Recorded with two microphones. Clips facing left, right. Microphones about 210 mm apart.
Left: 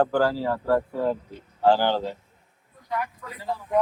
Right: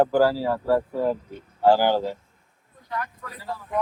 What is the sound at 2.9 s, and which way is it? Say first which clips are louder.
Speech: left 2 dB; 15° left (ahead or behind).